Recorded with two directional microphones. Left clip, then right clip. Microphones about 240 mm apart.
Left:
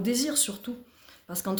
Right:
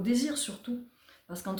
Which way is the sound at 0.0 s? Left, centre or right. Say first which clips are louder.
Left 3 dB; left.